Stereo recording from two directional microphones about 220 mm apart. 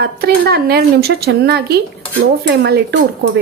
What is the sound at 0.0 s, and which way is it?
Speech, 45° right (ahead or behind).